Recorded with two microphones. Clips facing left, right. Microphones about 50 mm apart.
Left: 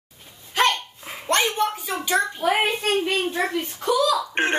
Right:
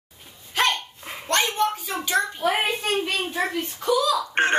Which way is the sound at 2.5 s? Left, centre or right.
Centre.